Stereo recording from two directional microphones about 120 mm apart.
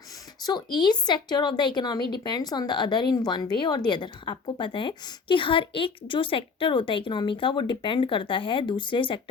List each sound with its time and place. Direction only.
0.4 s a woman's voice: 35° left (ahead or behind)